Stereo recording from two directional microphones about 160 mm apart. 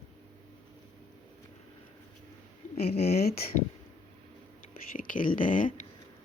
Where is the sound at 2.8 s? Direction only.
40° left (ahead or behind).